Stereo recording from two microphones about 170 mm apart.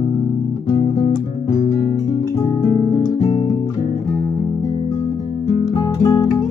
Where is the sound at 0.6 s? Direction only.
25° left (ahead or behind).